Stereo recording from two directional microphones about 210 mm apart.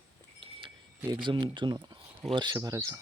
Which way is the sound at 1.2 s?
20° right (ahead or behind).